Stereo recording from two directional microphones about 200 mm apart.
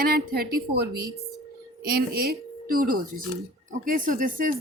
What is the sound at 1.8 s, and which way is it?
A woman's voice, 50° right (ahead or behind).